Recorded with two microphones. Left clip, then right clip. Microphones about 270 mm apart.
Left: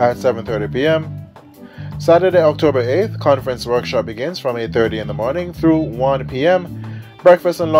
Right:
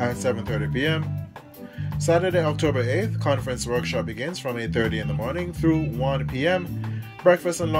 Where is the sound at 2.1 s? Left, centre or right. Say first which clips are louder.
Left 10 dB; centre.